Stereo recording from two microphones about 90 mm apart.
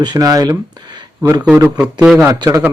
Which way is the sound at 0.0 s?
45° right (ahead or behind).